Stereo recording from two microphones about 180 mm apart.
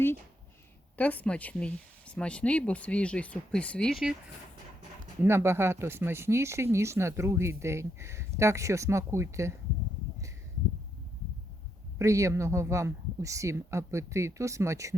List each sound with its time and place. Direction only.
0.9 s speech: 10° left (ahead or behind)
5.2 s speech: 15° right (ahead or behind)
11.9 s speech: 15° right (ahead or behind)